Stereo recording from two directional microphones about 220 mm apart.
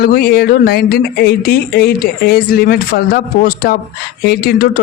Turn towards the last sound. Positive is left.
turn(degrees=40)  # may be behind; listen again after turning